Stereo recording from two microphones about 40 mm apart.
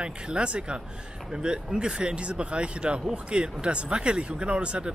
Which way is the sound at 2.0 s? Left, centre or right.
Right.